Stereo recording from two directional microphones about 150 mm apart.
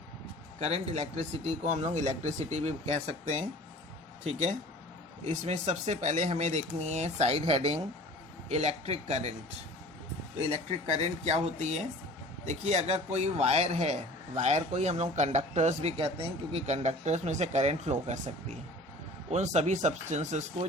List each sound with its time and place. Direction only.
0.6 s a man's voice: 45° right (ahead or behind)
11.0 s a man's voice: 45° right (ahead or behind)
19.3 s a man's voice: 50° right (ahead or behind)